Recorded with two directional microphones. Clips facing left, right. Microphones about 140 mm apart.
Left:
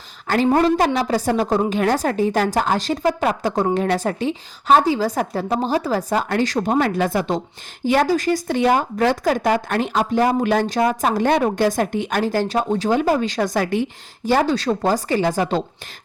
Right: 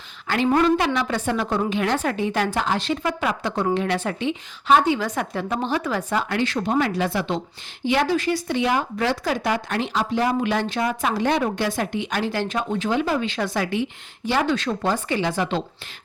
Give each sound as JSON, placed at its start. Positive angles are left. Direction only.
{"t": 0.3, "sound": "a woman's voice", "side_deg": 40}